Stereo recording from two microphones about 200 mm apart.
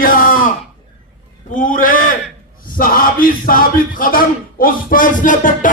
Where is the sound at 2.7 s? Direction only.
45° left (ahead or behind).